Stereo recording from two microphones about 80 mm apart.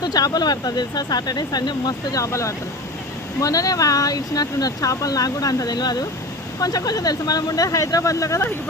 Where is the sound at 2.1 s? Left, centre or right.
Left.